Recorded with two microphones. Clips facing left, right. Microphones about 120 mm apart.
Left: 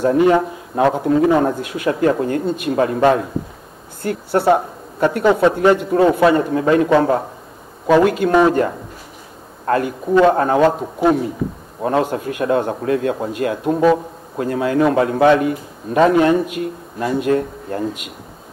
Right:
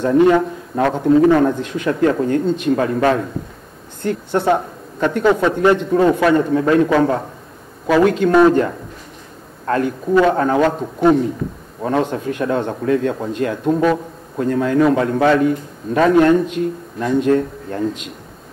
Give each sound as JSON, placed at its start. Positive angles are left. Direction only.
{"t": 0.0, "sound": "a woman's voice", "side_deg": 10}
{"t": 4.0, "sound": "a woman's voice", "side_deg": 5}
{"t": 8.0, "sound": "a woman's voice", "side_deg": 5}
{"t": 10.1, "sound": "a woman's voice", "side_deg": 15}
{"t": 10.8, "sound": "a man's voice", "side_deg": 5}